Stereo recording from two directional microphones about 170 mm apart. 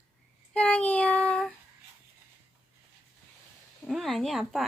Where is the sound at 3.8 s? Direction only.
Centre (ahead or behind).